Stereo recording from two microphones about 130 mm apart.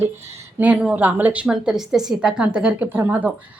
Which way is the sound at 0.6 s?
10° right (ahead or behind).